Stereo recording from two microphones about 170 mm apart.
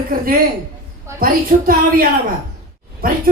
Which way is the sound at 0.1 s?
55° right (ahead or behind).